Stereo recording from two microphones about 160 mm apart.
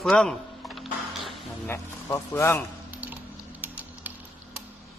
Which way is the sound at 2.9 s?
10° right (ahead or behind).